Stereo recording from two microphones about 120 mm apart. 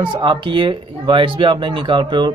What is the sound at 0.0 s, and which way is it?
Speech, 40° right (ahead or behind).